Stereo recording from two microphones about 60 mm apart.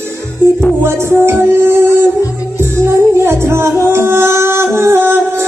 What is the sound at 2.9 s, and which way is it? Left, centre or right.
Music, right.